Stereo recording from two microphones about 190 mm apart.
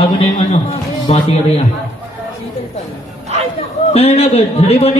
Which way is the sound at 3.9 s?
35° left (ahead or behind).